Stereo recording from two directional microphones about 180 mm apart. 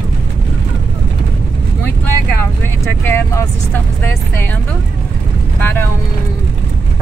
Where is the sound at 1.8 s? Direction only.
10° left (ahead or behind).